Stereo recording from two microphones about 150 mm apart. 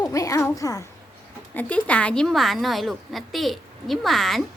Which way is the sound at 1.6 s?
10° left (ahead or behind).